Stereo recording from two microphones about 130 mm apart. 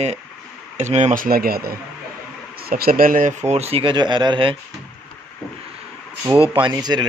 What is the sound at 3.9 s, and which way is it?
Speech, 35° right (ahead or behind).